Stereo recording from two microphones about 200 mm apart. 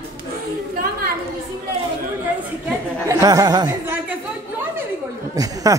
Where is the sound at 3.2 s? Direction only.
20° right (ahead or behind).